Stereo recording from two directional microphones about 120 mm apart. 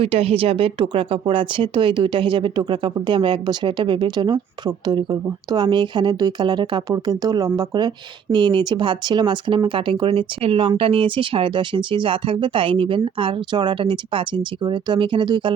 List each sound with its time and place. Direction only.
0.0 s speech: 55° right (ahead or behind)